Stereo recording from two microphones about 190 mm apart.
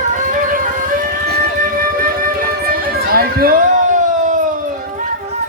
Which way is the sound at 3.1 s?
50° right (ahead or behind).